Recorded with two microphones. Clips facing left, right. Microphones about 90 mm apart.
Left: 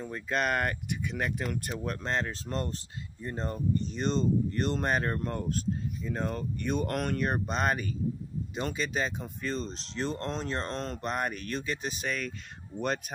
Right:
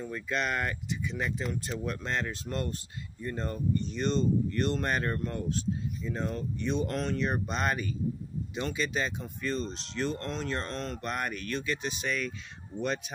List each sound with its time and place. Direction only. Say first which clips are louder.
0.0 s speech: left 2 dB; 40° left (ahead or behind); by 1.6 s 60° left (ahead or behind)
1.9 s speech: left 2 dB; 35° left (ahead or behind)
3.8 s speech: right 1 dB; 35° left (ahead or behind); by 7.3 s 55° left (ahead or behind)
7.3 s speech: left 1 dB; 40° left (ahead or behind)